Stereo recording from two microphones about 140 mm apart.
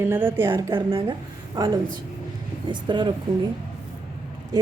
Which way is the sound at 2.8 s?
35° right (ahead or behind).